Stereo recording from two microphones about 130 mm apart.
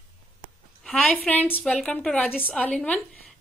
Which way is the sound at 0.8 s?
10° left (ahead or behind).